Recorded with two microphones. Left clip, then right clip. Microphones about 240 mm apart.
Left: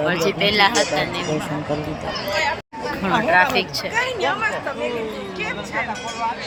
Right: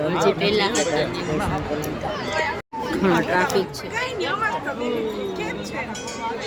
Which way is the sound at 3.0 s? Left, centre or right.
Centre.